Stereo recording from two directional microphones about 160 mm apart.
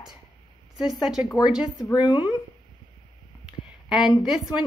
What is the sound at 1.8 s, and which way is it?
Speech, 20° left (ahead or behind).